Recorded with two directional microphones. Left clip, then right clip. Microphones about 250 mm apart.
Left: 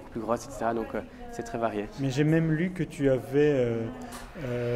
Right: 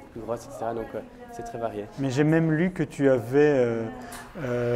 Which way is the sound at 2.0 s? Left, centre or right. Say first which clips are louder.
Right 4 dB; right.